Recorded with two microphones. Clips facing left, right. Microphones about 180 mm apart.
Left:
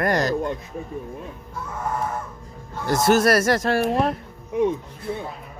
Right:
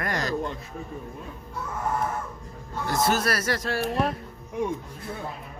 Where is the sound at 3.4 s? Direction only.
45° left (ahead or behind).